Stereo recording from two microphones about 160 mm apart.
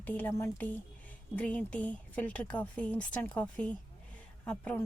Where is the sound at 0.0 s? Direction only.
10° left (ahead or behind).